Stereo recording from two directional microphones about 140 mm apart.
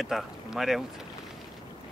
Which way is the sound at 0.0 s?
Centre (ahead or behind).